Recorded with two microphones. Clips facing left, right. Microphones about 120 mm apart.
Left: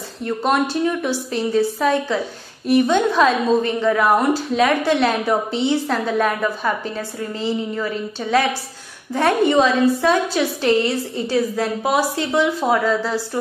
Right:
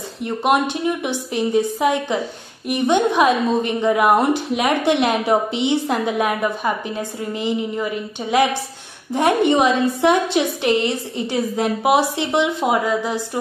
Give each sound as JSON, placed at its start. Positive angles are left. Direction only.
{"t": 0.2, "sound": "a woman's voice", "side_deg": -15}